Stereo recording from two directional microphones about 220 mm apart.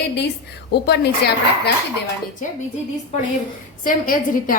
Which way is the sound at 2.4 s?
35° left (ahead or behind).